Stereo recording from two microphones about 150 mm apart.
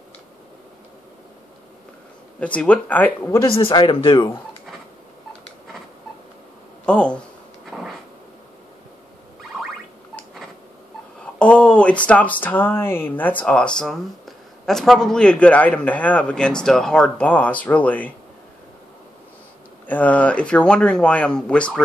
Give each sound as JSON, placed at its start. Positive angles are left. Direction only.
{"t": 2.4, "sound": "speech", "side_deg": 10}
{"t": 3.4, "sound": "speech", "side_deg": 35}
{"t": 6.9, "sound": "speech", "side_deg": 5}
{"t": 7.7, "sound": "a sound", "side_deg": -5}
{"t": 11.3, "sound": "speech", "side_deg": 5}
{"t": 19.9, "sound": "speech", "side_deg": 10}